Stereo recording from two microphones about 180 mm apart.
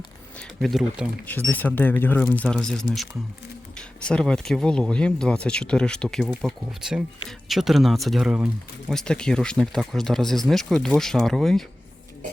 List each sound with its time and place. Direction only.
0.3 s speech: centre (ahead or behind)
1.3 s speech: 10° left (ahead or behind)